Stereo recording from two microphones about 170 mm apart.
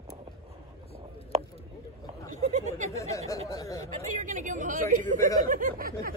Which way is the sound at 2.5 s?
45° right (ahead or behind).